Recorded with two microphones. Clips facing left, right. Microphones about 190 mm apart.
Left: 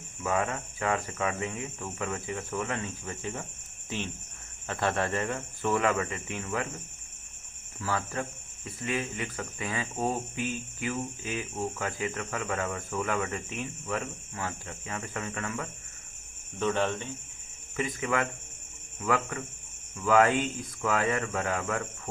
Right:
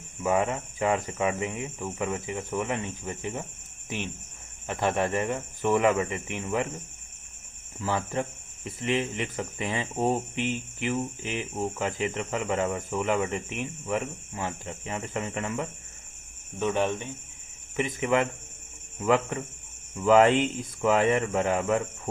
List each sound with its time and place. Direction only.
0.2 s speech: 20° right (ahead or behind)
7.8 s speech: 20° right (ahead or behind)